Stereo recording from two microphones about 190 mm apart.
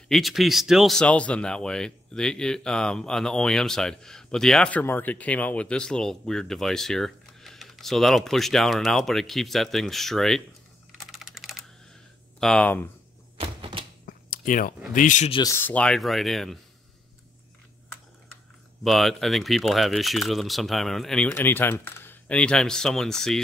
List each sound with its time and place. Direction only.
0.1 s speech: centre (ahead or behind)
11.0 s typing: centre (ahead or behind)
12.4 s speech: 5° left (ahead or behind)
13.4 s a sound: 25° right (ahead or behind)
14.0 s a sound: 45° left (ahead or behind)
15.0 s speech: 40° left (ahead or behind)
15.3 s speech: 15° left (ahead or behind); by 16.5 s centre (ahead or behind)
18.9 s speech: centre (ahead or behind)